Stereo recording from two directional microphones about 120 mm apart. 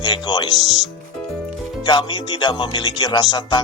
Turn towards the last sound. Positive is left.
turn(degrees=35)  # may be behind; listen again after turning